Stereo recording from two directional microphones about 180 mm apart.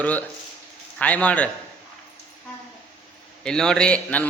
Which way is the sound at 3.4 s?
5° left (ahead or behind).